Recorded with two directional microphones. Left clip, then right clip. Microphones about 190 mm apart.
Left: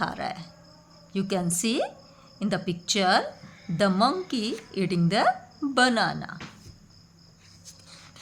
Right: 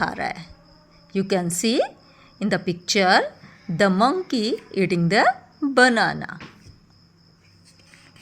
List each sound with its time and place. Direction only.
0.0 s a woman's voice: 25° right (ahead or behind)